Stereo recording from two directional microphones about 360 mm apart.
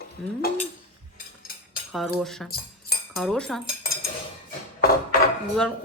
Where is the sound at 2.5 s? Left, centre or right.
Left.